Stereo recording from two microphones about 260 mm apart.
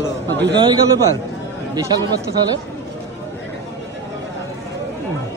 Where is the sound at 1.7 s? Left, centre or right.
Centre.